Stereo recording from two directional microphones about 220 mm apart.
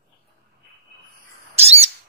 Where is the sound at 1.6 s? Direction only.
30° right (ahead or behind).